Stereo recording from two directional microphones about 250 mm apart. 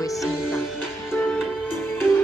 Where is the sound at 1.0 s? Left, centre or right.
Centre.